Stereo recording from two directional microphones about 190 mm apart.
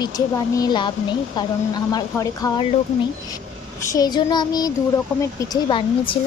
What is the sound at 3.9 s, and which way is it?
A woman's voice, 20° left (ahead or behind).